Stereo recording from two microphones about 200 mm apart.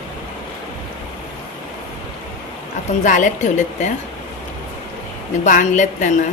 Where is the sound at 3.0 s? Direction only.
40° left (ahead or behind).